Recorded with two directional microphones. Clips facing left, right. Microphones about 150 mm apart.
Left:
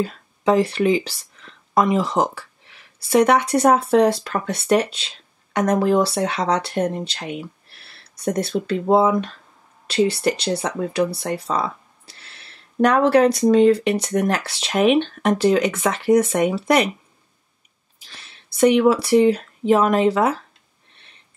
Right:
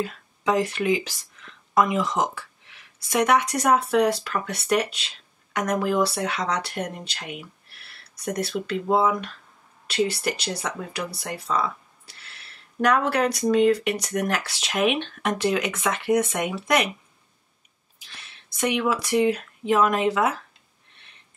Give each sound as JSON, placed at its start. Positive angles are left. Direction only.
{"t": 0.0, "sound": "speech", "side_deg": 30}
{"t": 12.8, "sound": "speech", "side_deg": 30}
{"t": 18.1, "sound": "speech", "side_deg": 35}